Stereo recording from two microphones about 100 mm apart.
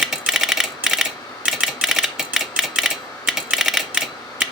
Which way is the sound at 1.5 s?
5° right (ahead or behind).